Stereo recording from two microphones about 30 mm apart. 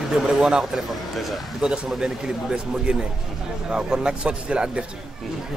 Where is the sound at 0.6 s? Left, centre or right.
Centre.